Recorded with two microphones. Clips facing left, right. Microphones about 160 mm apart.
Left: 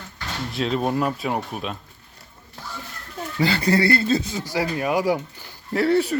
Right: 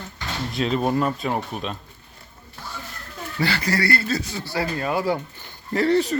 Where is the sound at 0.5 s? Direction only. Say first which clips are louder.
Right 1 dB; centre (ahead or behind).